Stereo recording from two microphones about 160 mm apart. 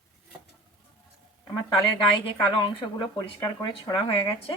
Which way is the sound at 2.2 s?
30° left (ahead or behind).